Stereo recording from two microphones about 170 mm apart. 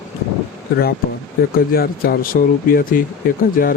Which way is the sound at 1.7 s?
60° left (ahead or behind).